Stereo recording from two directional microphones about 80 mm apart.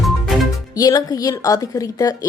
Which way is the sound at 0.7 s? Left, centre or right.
Left.